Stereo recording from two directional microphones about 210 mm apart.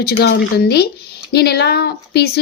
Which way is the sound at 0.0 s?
50° left (ahead or behind).